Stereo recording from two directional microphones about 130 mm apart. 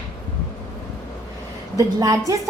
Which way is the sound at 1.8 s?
25° right (ahead or behind).